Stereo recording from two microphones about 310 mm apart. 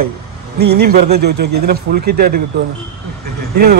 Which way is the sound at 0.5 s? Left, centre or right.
Right.